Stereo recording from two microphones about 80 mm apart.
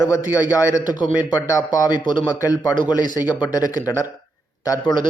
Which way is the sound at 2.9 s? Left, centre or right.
Left.